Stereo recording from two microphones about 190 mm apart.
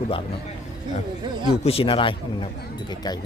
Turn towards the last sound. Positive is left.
turn(degrees=20)  # may be behind; listen again after turning